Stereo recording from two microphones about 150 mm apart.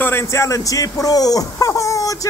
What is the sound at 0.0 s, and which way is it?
Speech, 15° left (ahead or behind).